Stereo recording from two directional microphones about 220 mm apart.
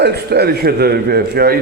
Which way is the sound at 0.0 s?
45° right (ahead or behind).